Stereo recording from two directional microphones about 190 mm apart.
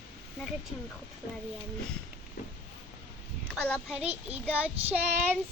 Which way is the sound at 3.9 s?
5° right (ahead or behind).